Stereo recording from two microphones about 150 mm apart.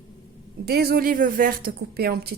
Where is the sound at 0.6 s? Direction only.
90° right.